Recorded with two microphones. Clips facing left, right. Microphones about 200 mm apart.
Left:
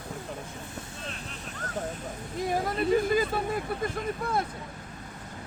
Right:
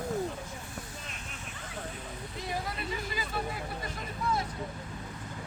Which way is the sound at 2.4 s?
50° left (ahead or behind).